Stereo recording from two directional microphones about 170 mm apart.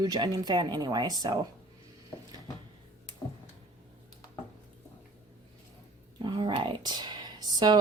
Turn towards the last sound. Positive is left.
turn(degrees=-25)  # may be behind; listen again after turning